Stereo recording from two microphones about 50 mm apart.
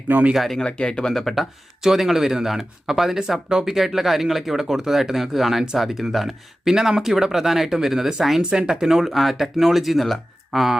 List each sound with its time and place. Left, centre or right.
0.3 s speech: centre
0.6 s speech: centre
1.1 s speech: centre
1.8 s speech: centre
8.4 s speech: centre